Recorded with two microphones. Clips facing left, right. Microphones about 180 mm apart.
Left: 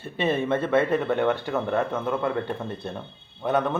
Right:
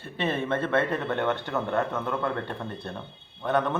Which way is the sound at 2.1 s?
15° left (ahead or behind).